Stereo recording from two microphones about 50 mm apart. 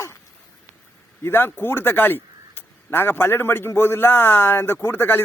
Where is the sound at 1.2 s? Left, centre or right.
Left.